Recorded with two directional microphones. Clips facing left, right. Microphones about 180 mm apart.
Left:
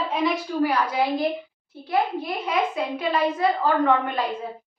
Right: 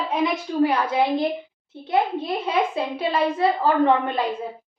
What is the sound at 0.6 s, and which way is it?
A child's voice, 25° right (ahead or behind).